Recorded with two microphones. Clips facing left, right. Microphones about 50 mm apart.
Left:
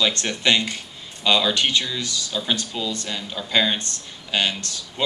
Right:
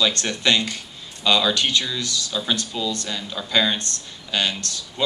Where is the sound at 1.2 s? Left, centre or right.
Centre.